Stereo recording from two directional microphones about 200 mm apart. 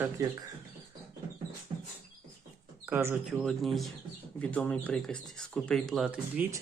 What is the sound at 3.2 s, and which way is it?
Speech, centre (ahead or behind).